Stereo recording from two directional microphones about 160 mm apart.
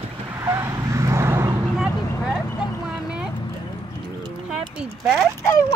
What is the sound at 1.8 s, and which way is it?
Vehicle, 5° right (ahead or behind).